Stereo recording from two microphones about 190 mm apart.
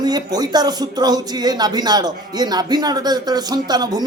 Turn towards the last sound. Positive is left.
turn(degrees=-20)  # may be behind; listen again after turning